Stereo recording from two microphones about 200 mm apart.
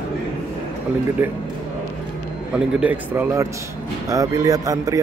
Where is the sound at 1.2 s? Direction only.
10° right (ahead or behind).